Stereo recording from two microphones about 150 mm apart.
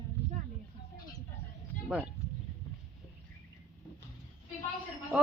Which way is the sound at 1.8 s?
10° right (ahead or behind).